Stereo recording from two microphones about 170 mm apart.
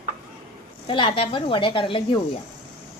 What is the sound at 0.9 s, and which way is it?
A woman's voice, 30° left (ahead or behind).